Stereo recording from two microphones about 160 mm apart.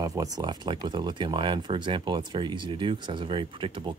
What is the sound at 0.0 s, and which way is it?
Speech, 20° right (ahead or behind).